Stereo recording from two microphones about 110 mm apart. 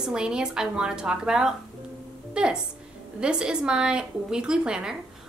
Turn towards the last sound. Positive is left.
turn(degrees=-5)  # may be behind; listen again after turning